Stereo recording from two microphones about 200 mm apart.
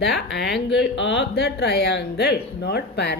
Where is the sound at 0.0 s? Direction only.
60° left (ahead or behind).